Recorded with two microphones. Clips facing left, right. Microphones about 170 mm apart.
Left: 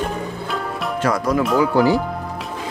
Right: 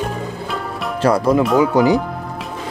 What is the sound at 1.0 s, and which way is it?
Speech, 30° right (ahead or behind).